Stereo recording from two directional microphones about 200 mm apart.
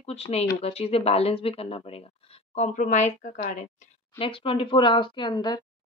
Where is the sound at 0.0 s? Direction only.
30° left (ahead or behind).